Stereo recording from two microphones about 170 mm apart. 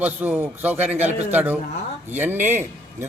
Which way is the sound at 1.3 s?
10° right (ahead or behind).